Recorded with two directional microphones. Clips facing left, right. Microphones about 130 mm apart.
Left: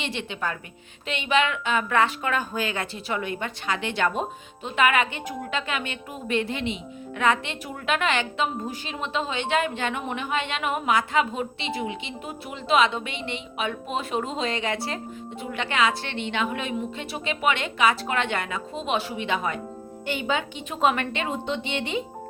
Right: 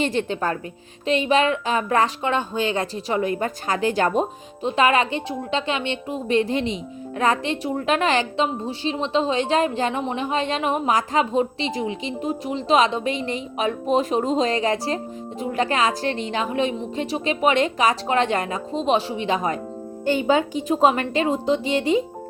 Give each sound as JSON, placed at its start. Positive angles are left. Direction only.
{"t": 0.0, "sound": "a woman's voice", "side_deg": -45}